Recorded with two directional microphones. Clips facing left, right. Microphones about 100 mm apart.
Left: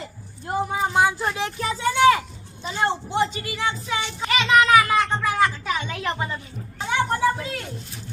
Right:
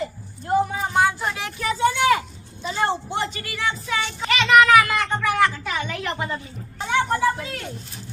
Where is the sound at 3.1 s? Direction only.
20° left (ahead or behind).